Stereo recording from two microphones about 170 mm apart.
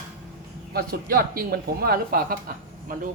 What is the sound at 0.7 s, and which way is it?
Speech, 60° right (ahead or behind).